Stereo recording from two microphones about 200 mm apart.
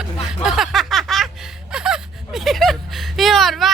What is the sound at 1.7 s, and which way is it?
Gasp, 5° right (ahead or behind).